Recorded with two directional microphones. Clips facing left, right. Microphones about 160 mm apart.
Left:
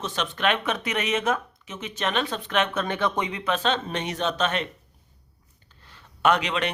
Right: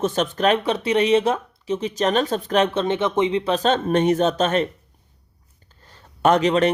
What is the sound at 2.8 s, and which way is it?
Speech, 20° right (ahead or behind).